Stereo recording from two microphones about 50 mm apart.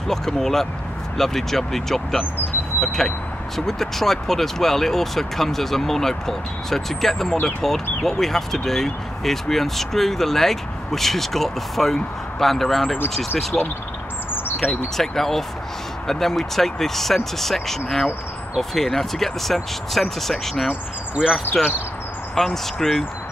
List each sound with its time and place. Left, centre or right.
0.1 s speech: centre
21.1 s speech: centre
22.3 s speech: centre